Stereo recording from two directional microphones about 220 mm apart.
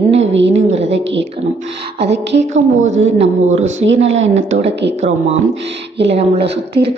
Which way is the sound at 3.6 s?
60° right (ahead or behind).